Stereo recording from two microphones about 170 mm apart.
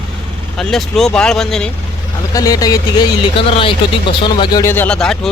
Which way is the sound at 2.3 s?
20° left (ahead or behind).